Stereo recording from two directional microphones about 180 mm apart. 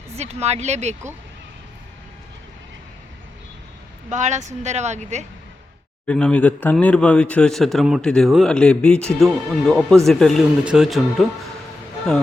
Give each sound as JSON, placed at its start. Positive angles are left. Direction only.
{"t": 0.2, "sound": "speech", "side_deg": -35}
{"t": 4.1, "sound": "speech", "side_deg": -40}
{"t": 6.1, "sound": "speech", "side_deg": 5}